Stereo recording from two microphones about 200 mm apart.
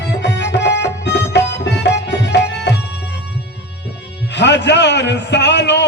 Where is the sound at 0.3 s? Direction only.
60° left (ahead or behind).